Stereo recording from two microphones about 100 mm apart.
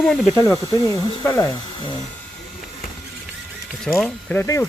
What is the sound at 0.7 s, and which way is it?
Speech, 30° left (ahead or behind).